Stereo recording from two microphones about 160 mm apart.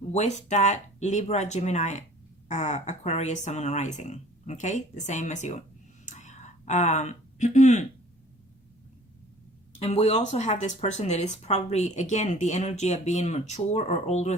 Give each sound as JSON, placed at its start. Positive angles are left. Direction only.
{"t": 0.1, "sound": "speech", "side_deg": 45}
{"t": 6.1, "sound": "a sound", "side_deg": 50}
{"t": 9.7, "sound": "speech", "side_deg": 40}